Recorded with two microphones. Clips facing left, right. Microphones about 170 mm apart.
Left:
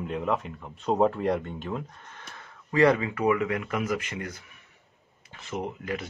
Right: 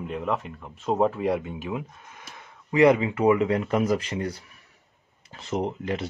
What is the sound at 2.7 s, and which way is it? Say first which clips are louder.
Speech: right 3 dB; 20° right (ahead or behind).